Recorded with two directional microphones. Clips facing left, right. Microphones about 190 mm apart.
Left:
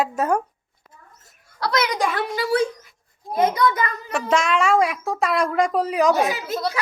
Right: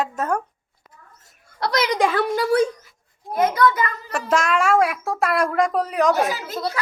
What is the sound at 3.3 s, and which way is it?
Speech, 20° left (ahead or behind).